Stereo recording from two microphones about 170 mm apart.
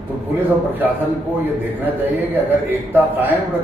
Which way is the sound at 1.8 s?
10° right (ahead or behind).